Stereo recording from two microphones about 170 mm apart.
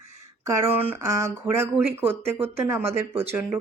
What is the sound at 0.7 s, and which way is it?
Speech, 15° right (ahead or behind).